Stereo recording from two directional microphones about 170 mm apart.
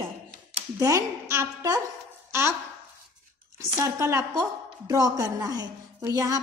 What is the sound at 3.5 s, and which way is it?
A woman's voice, 15° right (ahead or behind).